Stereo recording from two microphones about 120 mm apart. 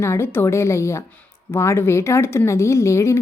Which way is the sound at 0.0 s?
20° left (ahead or behind).